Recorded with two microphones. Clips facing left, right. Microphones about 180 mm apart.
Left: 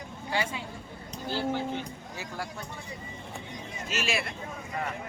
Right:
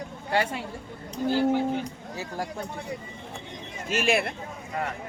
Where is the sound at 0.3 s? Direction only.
60° right (ahead or behind).